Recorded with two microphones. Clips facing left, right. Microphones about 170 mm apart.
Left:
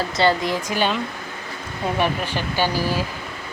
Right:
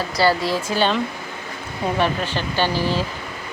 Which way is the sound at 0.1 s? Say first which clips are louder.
Right 2 dB; 20° left (ahead or behind).